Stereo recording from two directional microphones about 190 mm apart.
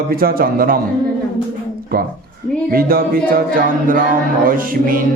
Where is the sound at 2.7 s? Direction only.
50° right (ahead or behind).